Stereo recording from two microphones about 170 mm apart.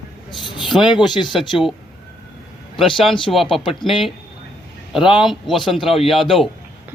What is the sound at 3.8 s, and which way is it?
A man's voice, centre (ahead or behind).